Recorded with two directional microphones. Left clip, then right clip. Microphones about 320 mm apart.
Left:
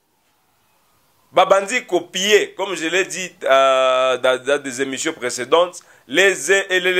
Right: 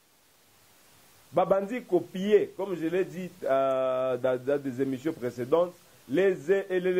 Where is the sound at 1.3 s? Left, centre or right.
Centre.